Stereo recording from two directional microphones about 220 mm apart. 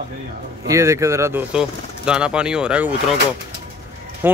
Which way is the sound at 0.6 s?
15° right (ahead or behind).